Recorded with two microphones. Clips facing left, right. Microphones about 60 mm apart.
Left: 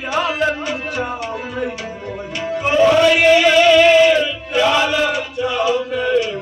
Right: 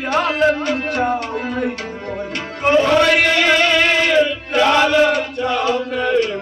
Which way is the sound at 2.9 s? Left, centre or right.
Right.